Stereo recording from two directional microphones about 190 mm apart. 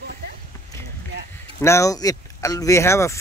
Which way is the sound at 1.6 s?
15° left (ahead or behind).